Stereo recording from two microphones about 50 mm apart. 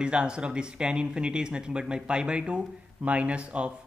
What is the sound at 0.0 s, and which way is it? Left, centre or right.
Speech, centre.